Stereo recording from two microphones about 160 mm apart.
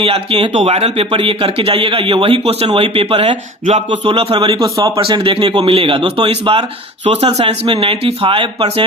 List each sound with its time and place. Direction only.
0.0 s speech: 35° right (ahead or behind)